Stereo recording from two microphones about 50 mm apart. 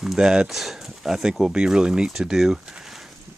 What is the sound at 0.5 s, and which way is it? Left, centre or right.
Speech, centre.